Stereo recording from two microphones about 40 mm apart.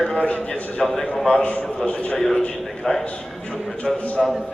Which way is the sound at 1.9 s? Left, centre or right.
Left.